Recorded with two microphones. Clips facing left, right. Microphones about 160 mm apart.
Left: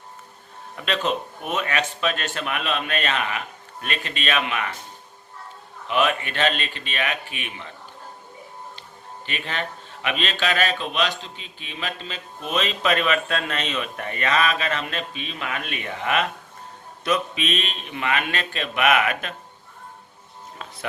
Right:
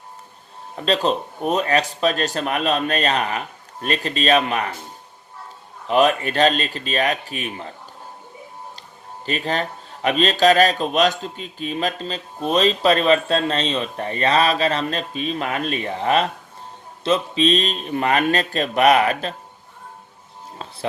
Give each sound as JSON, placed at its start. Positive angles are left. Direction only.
{"t": 0.8, "sound": "speech", "side_deg": -35}
{"t": 5.9, "sound": "speech", "side_deg": -40}
{"t": 9.2, "sound": "speech", "side_deg": -40}